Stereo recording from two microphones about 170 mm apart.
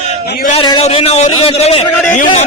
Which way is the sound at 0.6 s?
30° left (ahead or behind).